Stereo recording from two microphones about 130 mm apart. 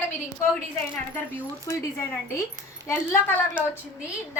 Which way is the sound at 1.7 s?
25° left (ahead or behind).